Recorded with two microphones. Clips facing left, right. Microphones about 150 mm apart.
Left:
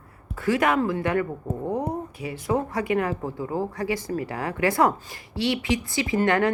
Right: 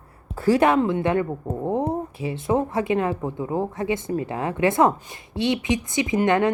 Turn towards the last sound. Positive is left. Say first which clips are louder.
# right 2 dB
turn(degrees=-20)  # may be behind; listen again after turning